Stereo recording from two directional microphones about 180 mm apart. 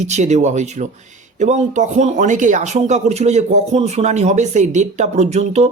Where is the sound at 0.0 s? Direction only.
40° right (ahead or behind).